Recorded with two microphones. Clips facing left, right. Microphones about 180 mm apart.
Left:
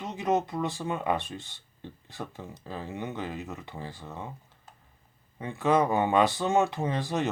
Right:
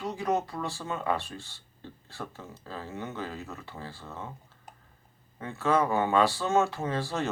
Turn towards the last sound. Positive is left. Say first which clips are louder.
# left 2 dB
turn(degrees=15)  # may be behind; listen again after turning